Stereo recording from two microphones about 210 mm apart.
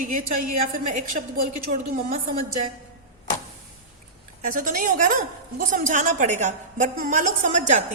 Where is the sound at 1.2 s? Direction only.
40° right (ahead or behind).